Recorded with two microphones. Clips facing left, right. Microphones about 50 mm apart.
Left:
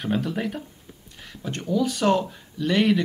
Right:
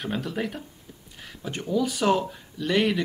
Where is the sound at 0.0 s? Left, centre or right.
Centre.